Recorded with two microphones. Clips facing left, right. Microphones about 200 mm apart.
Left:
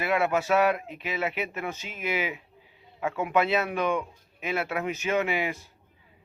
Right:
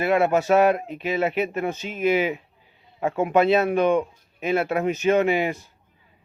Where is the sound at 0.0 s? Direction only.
40° right (ahead or behind).